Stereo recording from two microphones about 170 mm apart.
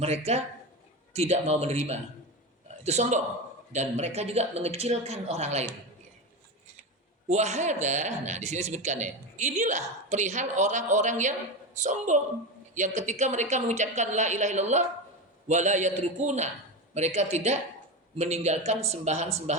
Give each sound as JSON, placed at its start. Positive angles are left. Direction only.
{"t": 0.3, "sound": "speech", "side_deg": -40}
{"t": 7.3, "sound": "speech", "side_deg": -40}